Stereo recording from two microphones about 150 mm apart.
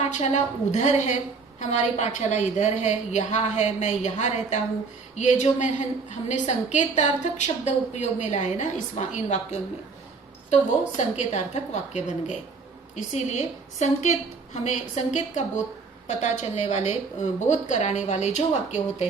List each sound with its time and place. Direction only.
0.7 s a woman's voice: 50° left (ahead or behind)